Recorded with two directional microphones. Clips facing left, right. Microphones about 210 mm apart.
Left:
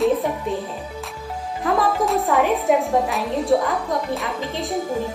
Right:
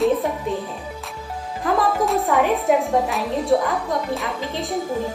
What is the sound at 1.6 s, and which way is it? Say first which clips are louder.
A woman's voice: even; centre (ahead or behind).